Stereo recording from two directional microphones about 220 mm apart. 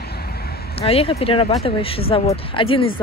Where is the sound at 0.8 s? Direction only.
25° left (ahead or behind).